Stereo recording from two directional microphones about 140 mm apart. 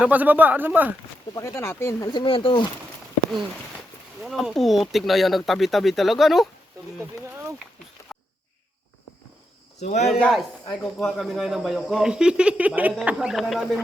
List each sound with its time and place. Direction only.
0.0 s speech: 10° right (ahead or behind)
1.4 s speech: 20° left (ahead or behind)
2.1 s speech: 40° left (ahead or behind)
4.2 s speech: centre (ahead or behind)
7.0 s a sound: 20° right (ahead or behind)
8.1 s a sound: centre (ahead or behind)
9.8 s speech: 55° left (ahead or behind)
10.1 s speech: 5° left (ahead or behind)